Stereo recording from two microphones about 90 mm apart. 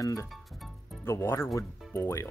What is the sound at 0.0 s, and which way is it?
Speech, 40° left (ahead or behind).